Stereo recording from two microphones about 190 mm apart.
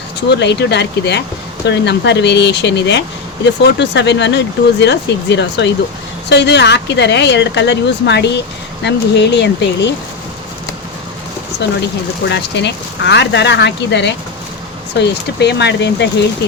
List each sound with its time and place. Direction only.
0.3 s speech: 65° left (ahead or behind)
12.3 s speech: 65° left (ahead or behind)